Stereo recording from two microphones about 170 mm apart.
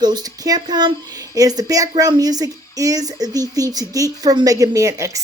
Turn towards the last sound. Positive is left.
turn(degrees=-20)  # may be behind; listen again after turning